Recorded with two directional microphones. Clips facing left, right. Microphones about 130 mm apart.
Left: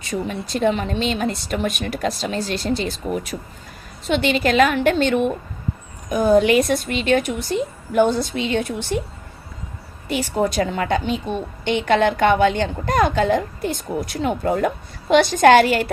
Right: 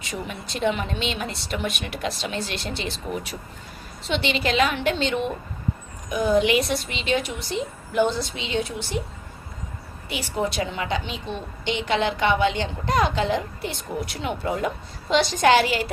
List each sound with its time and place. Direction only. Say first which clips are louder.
0.0 s a woman's voice: left 7 dB; 40° left (ahead or behind)
10.1 s a woman's voice: left 6 dB; 45° left (ahead or behind)